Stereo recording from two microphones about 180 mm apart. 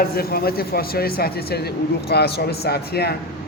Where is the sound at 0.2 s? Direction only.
55° left (ahead or behind).